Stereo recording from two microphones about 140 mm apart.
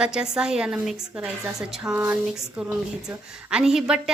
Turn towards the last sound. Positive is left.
turn(degrees=-5)  # may be behind; listen again after turning